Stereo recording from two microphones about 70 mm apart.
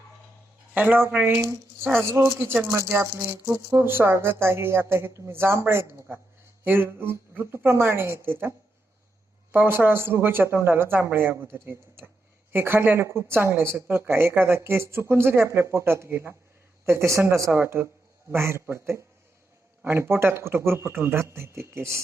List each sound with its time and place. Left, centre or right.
0.7 s speech: right
1.3 s speech: right
3.8 s speech: right
13.7 s speech: right